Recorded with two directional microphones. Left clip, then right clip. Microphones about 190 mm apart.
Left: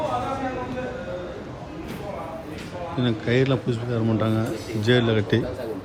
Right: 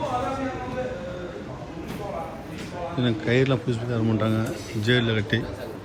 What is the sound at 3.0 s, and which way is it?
A man's voice, 5° left (ahead or behind).